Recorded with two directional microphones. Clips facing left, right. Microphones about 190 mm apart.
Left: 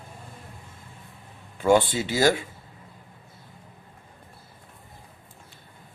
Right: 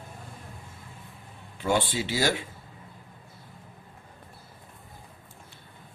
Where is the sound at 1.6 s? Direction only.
45° left (ahead or behind).